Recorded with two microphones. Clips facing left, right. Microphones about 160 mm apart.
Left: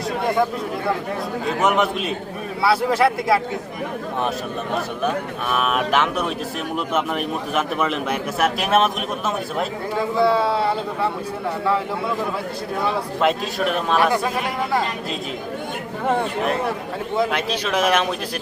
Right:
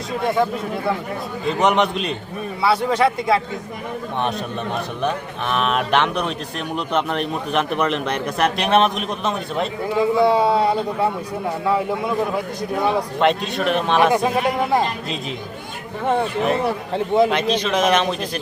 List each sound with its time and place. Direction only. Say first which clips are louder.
1.5 s a man's voice: right 2 dB; 5° left (ahead or behind)
5.0 s a man's voice: right 2 dB; 5° left (ahead or behind)
10.0 s a man's voice: right 3 dB; 20° right (ahead or behind)
13.1 s a man's voice: right 2 dB; centre (ahead or behind)
16.0 s a man's voice: right 2 dB; centre (ahead or behind)